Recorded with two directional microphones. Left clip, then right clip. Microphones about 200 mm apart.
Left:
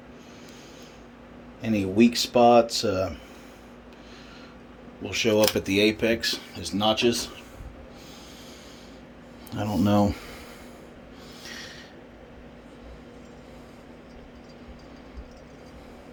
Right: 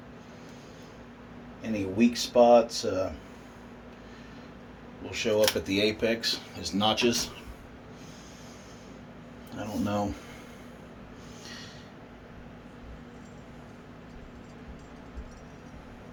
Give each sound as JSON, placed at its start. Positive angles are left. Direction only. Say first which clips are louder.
{"t": 1.6, "sound": "speech", "louder": "left 5 dB", "side_deg": 55}
{"t": 5.0, "sound": "speech", "louder": "left 3 dB", "side_deg": 55}
{"t": 9.5, "sound": "speech", "louder": "left 7 dB", "side_deg": 50}
{"t": 11.4, "sound": "a sound", "louder": "left 5 dB", "side_deg": 40}